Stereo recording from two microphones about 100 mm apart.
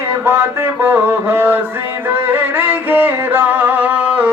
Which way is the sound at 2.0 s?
20° right (ahead or behind).